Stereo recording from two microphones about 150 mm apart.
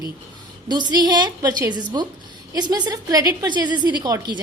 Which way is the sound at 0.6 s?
30° right (ahead or behind).